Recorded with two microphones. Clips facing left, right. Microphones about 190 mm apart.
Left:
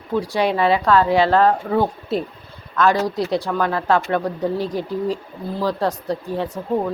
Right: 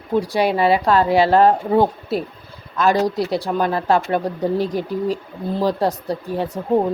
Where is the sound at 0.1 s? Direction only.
10° right (ahead or behind).